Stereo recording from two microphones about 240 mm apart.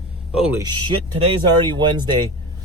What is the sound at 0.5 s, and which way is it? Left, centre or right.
Speech, centre.